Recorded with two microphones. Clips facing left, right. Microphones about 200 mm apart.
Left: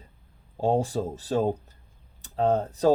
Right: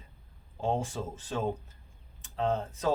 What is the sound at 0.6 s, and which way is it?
Speech, 35° left (ahead or behind).